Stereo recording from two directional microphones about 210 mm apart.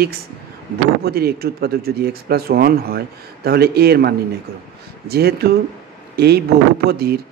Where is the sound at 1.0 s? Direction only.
50° right (ahead or behind).